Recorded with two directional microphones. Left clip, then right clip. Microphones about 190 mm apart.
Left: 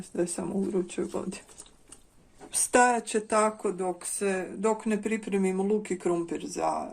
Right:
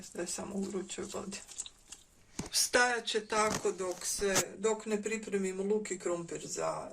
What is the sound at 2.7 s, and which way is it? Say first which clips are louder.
Speech: left 7 dB; 45° left (ahead or behind).